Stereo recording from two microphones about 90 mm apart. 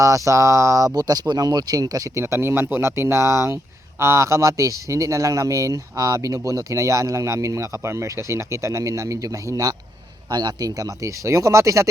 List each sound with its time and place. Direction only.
0.0 s speech: 35° right (ahead or behind)
0.9 s speech: 45° right (ahead or behind)
2.2 s speech: 25° right (ahead or behind)
10.2 s speech: 50° right (ahead or behind)